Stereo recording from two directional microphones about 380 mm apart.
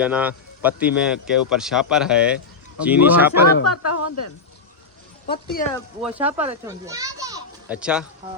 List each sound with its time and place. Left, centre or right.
0.0 s speech: centre
3.4 s speech: left
5.2 s speech: left
5.7 s a child's voice: centre